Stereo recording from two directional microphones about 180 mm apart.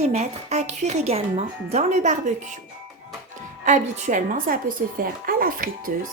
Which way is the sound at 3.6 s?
45° right (ahead or behind).